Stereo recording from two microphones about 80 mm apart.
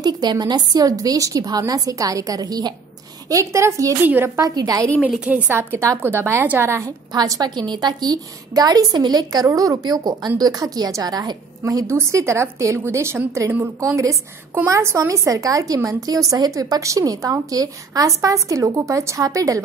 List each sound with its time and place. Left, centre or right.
0.0 s a woman's voice: right
3.3 s a woman's voice: right
4.0 s a woman's voice: right
4.4 s a woman's voice: right
5.5 s a woman's voice: right
7.1 s a woman's voice: right
9.5 s a woman's voice: right
11.6 s a woman's voice: right